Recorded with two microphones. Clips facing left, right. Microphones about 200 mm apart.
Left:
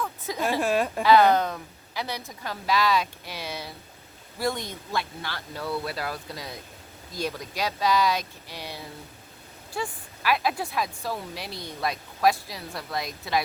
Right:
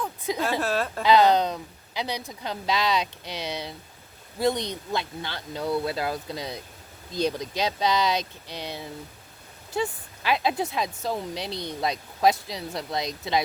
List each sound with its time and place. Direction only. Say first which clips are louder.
0.0 s a sound: right 3 dB; 15° right (ahead or behind)
0.6 s a woman's voice: left 2 dB; 15° left (ahead or behind)
1.0 s a woman's voice: right 1 dB; 15° right (ahead or behind)
11.5 s speech: right 5 dB; centre (ahead or behind)
11.8 s a woman's voice: right 1 dB; 20° right (ahead or behind)